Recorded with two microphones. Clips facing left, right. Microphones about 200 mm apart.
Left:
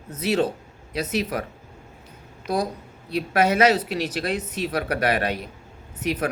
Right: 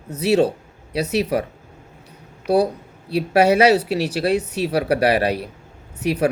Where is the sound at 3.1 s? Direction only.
30° right (ahead or behind).